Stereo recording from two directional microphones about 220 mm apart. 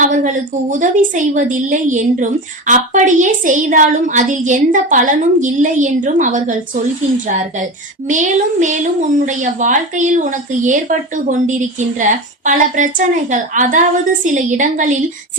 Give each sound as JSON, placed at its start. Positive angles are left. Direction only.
{"t": 0.7, "sound": "a woman's voice", "side_deg": -35}
{"t": 8.0, "sound": "a woman's voice", "side_deg": -35}
{"t": 12.5, "sound": "a woman's voice", "side_deg": -35}